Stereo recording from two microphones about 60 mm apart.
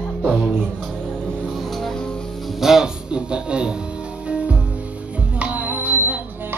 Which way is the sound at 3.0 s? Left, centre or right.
Centre.